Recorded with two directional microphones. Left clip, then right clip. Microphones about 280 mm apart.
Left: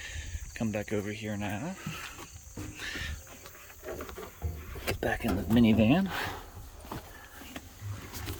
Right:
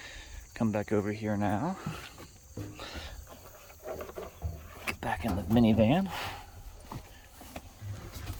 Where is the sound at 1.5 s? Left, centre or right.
Centre.